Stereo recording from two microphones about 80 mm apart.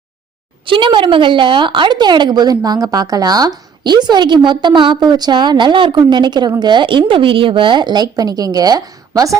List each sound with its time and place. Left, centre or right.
0.6 s a woman's voice: right
6.0 s a woman's voice: right